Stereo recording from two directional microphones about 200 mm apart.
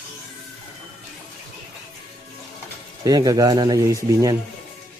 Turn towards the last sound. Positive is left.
turn(degrees=-15)  # may be behind; listen again after turning